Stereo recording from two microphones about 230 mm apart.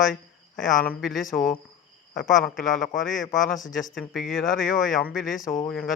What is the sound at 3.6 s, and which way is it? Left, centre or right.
Speech, left.